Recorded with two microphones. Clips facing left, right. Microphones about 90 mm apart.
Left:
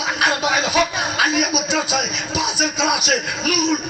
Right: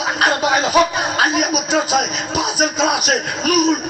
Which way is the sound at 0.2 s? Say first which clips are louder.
Right 3 dB; 40° right (ahead or behind).